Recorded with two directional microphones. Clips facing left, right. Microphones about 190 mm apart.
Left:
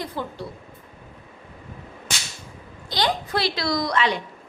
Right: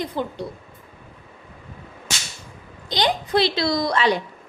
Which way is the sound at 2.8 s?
20° right (ahead or behind).